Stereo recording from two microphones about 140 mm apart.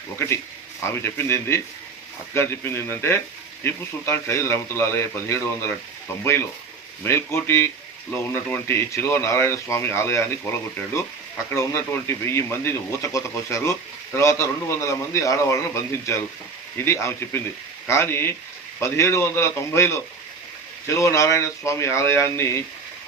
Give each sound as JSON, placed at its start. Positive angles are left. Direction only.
{"t": 1.0, "sound": "speech", "side_deg": 20}
{"t": 7.0, "sound": "speech", "side_deg": 20}
{"t": 11.5, "sound": "speech", "side_deg": 20}